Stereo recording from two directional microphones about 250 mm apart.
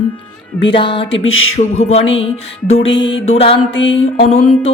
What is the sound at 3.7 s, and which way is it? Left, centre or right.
Music, left.